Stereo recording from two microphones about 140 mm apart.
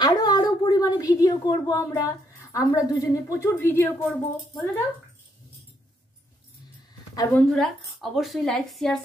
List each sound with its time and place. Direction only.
0.0 s a sound: 30° left (ahead or behind)
1.1 s a woman's voice: 25° left (ahead or behind); by 4.8 s 10° left (ahead or behind)
7.3 s speech: 5° left (ahead or behind)